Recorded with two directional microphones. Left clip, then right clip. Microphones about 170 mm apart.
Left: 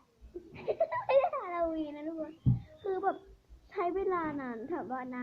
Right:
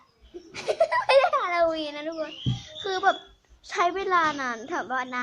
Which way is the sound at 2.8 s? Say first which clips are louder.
Right 9 dB; 15° right (ahead or behind).